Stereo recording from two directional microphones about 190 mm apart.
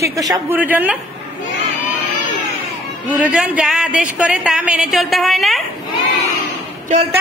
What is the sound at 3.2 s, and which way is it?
Speech, 5° right (ahead or behind).